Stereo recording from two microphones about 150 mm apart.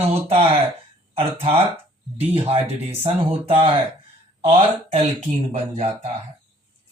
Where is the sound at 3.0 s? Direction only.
35° right (ahead or behind).